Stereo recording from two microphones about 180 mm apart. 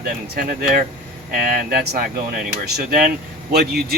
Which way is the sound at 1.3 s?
50° right (ahead or behind).